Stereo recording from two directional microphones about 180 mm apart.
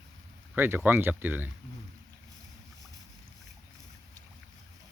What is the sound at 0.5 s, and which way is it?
Speech, 10° right (ahead or behind).